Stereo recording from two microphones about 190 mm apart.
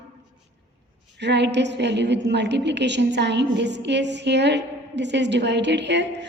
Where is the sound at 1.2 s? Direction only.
65° right (ahead or behind).